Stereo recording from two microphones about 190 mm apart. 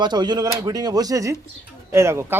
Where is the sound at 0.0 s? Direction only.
20° right (ahead or behind).